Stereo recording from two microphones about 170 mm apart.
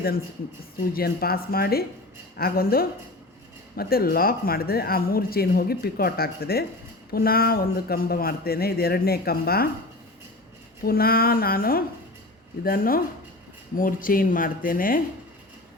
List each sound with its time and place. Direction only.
0.9 s speech: 65° left (ahead or behind)
10.8 s speech: 60° left (ahead or behind)